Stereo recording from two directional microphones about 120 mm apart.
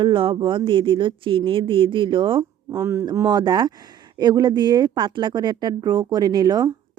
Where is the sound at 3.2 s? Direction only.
35° right (ahead or behind).